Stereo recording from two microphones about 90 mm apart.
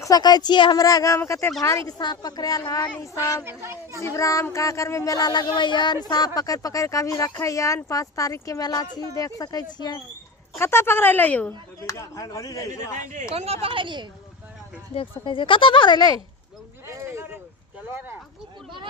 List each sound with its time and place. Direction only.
0.0 s a woman's voice: 45° left (ahead or behind)
0.8 s speech: 40° left (ahead or behind)
1.9 s a woman's voice: 50° left (ahead or behind)
3.0 s speech: 35° left (ahead or behind)
3.4 s a woman's voice: 30° right (ahead or behind)
4.0 s speech: 35° left (ahead or behind); by 10.0 s 55° left (ahead or behind)
10.6 s speech: 25° left (ahead or behind)
11.9 s speech: 40° left (ahead or behind)
13.3 s a woman's voice: 90° right; by 14.1 s 60° right (ahead or behind)
15.2 s speech: 70° left (ahead or behind); by 16.2 s 50° left (ahead or behind)
16.8 s a sound: 30° right (ahead or behind)
17.8 s a woman's voice: 25° right (ahead or behind)